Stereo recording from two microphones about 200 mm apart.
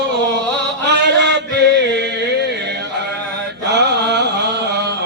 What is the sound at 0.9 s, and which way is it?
Chant, 60° right (ahead or behind).